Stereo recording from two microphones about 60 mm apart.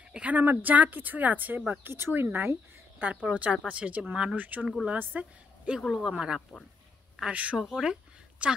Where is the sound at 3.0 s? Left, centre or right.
Right.